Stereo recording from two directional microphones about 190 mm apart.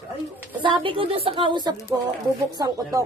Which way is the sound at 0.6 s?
25° right (ahead or behind).